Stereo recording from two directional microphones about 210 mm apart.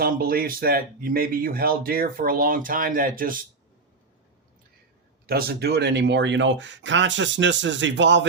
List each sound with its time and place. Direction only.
0.0 s speech: 45° right (ahead or behind)
5.2 s speech: 45° right (ahead or behind)